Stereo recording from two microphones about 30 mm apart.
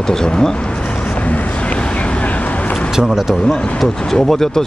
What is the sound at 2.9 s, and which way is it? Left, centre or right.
Speech, centre.